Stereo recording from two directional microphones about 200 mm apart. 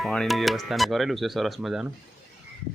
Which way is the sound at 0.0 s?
Centre (ahead or behind).